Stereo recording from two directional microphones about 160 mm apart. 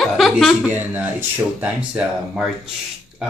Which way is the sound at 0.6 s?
10° right (ahead or behind).